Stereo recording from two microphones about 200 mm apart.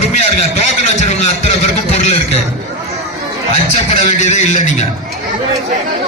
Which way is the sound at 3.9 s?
35° left (ahead or behind).